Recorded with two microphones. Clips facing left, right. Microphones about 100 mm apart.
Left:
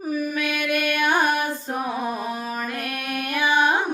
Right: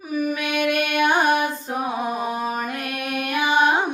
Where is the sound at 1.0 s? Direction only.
20° right (ahead or behind).